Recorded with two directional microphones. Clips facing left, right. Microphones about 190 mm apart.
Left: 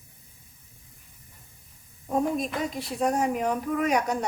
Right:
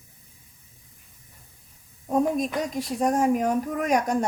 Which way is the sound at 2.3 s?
45° right (ahead or behind).